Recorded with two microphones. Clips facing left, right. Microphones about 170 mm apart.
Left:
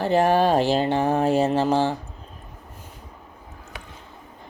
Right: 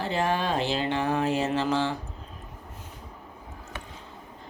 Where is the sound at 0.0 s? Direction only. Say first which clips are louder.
Left 8 dB; 50° left (ahead or behind).